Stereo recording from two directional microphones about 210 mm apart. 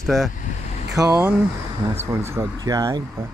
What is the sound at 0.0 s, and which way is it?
Speech, centre (ahead or behind).